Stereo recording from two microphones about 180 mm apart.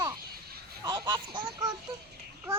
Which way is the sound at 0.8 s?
25° right (ahead or behind).